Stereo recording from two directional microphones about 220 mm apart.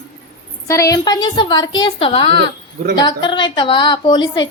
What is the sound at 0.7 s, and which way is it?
A woman's voice, 15° left (ahead or behind).